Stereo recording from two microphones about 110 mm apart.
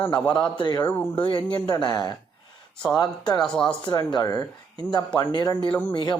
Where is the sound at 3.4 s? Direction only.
10° left (ahead or behind).